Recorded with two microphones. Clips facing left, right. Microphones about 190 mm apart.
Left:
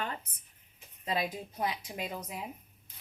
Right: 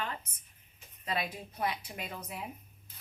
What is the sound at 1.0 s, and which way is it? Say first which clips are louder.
A woman's voice: left 2 dB; 25° left (ahead or behind).